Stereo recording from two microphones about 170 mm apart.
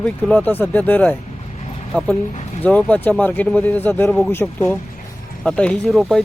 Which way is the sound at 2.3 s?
40° left (ahead or behind).